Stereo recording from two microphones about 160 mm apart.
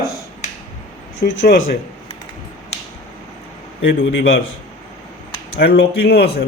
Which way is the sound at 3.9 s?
90° left.